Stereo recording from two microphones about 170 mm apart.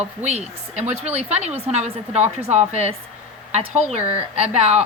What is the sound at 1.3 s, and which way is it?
A woman's voice, 40° right (ahead or behind).